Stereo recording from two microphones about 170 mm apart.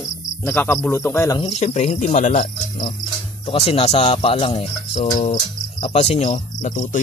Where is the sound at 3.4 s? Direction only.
35° left (ahead or behind).